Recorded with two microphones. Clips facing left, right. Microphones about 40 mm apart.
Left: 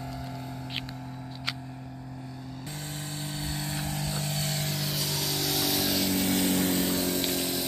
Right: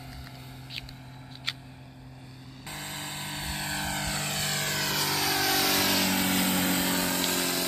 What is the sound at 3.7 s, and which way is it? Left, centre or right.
Vehicle, right.